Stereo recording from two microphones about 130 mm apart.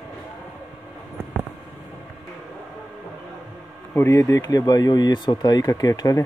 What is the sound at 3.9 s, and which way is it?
Speech, 20° left (ahead or behind).